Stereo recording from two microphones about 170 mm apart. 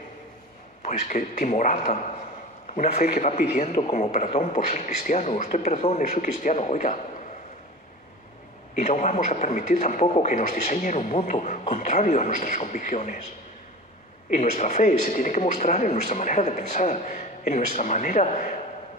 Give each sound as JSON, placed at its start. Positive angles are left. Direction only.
{"t": 0.8, "sound": "a man's voice", "side_deg": 55}
{"t": 4.8, "sound": "speech", "side_deg": 50}
{"t": 8.7, "sound": "speech", "side_deg": 45}
{"t": 14.3, "sound": "speech", "side_deg": 40}